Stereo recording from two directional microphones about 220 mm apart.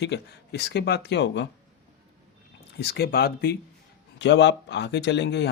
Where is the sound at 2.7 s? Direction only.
50° left (ahead or behind).